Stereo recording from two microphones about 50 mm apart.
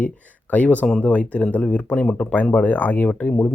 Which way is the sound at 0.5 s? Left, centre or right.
Left.